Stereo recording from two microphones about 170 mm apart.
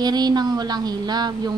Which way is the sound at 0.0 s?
25° right (ahead or behind).